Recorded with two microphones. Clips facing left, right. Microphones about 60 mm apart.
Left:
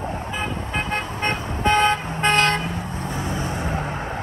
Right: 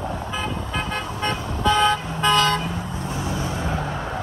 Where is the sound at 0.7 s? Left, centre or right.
Left.